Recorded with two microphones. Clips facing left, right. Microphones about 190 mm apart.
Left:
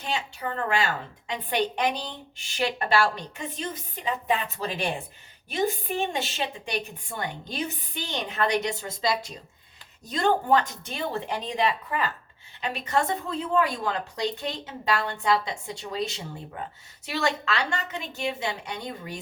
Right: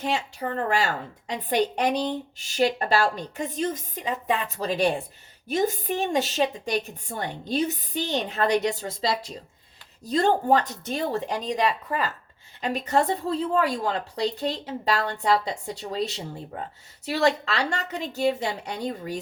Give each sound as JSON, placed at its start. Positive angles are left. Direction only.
{"t": 0.0, "sound": "a woman's voice", "side_deg": -40}